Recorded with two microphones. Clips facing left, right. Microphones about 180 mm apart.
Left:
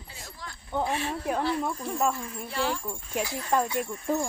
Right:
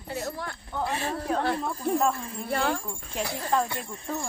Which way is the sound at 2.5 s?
55° right (ahead or behind).